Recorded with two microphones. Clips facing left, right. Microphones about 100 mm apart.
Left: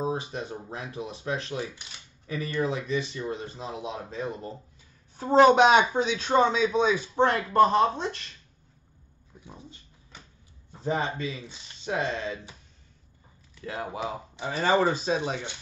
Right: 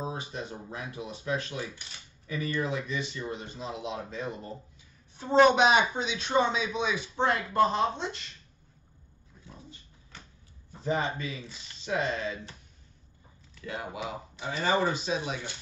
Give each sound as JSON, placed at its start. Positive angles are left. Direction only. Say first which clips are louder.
{"t": 0.0, "sound": "speech", "louder": "left 5 dB", "side_deg": 25}
{"t": 5.1, "sound": "speech", "louder": "left 3 dB", "side_deg": 40}
{"t": 9.4, "sound": "a sound", "louder": "left 3 dB", "side_deg": 20}
{"t": 10.8, "sound": "speech", "louder": "left 1 dB", "side_deg": 30}
{"t": 13.7, "sound": "speech", "louder": "left 3 dB", "side_deg": 35}